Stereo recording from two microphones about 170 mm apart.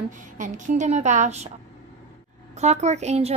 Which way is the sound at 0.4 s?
45° right (ahead or behind).